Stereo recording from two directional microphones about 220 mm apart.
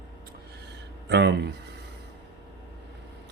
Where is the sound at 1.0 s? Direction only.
50° right (ahead or behind).